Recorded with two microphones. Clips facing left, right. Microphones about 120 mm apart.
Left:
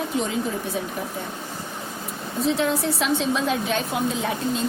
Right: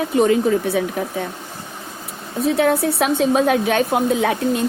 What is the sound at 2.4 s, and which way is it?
A woman's voice, 60° right (ahead or behind).